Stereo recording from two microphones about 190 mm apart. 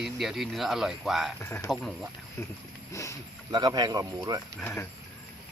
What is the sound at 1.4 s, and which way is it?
Speech, 10° left (ahead or behind).